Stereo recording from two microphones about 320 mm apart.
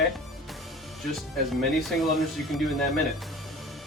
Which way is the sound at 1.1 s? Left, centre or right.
Centre.